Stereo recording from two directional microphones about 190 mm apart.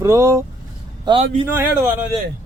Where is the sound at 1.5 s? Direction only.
10° right (ahead or behind).